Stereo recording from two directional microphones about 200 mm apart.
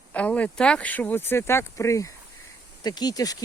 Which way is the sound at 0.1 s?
5° left (ahead or behind).